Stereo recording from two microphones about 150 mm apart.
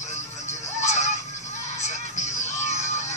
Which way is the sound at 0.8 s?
50° left (ahead or behind).